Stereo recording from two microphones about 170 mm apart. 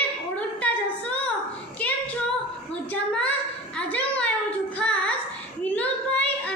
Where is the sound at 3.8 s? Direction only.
10° left (ahead or behind).